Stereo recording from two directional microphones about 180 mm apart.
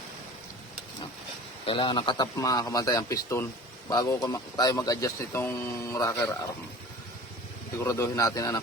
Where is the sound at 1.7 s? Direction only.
25° left (ahead or behind).